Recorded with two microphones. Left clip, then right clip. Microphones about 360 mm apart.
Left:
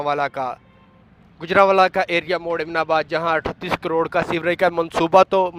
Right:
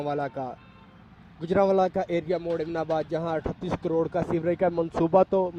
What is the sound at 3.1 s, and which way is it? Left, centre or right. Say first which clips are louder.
Speech: left 8 dB; left.